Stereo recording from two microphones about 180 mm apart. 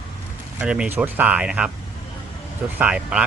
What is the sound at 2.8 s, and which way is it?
Speech, 5° right (ahead or behind).